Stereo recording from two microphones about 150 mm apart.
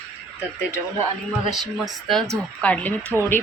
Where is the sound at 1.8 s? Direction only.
Centre (ahead or behind).